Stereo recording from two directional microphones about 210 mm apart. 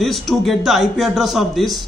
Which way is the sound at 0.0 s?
Centre (ahead or behind).